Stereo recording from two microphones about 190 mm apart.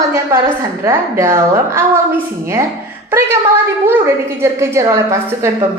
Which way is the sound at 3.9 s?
15° right (ahead or behind).